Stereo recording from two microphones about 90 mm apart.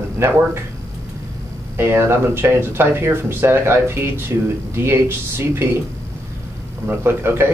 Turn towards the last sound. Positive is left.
turn(degrees=-25)  # may be behind; listen again after turning